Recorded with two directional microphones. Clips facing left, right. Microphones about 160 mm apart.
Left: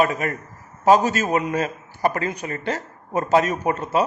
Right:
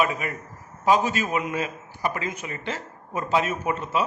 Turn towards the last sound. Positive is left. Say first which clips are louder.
# left 4 dB
turn(degrees=40)  # may be behind; listen again after turning